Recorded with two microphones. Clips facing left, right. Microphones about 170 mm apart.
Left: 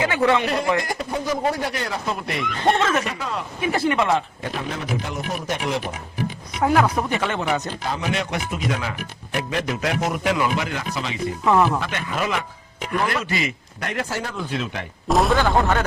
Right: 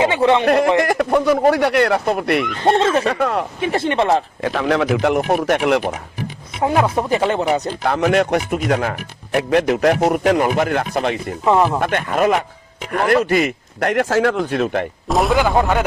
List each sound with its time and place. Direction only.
0.0 s speech: 25° right (ahead or behind)
0.4 s speech: 55° right (ahead or behind)
2.4 s speech: centre (ahead or behind)
2.7 s speech: 30° right (ahead or behind)
3.1 s speech: 60° right (ahead or behind)
3.6 s speech: 30° right (ahead or behind)
4.4 s speech: 90° right; by 5.8 s 70° right (ahead or behind)
6.6 s speech: 25° right (ahead or behind)
7.9 s speech: 65° right (ahead or behind)
9.8 s speech: 50° right (ahead or behind)
15.0 s a sound: centre (ahead or behind)
15.4 s speech: 10° right (ahead or behind)